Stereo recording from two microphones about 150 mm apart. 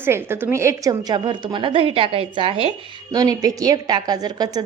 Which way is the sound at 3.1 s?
25° right (ahead or behind).